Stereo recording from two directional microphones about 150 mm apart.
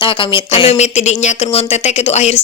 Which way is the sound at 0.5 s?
40° left (ahead or behind).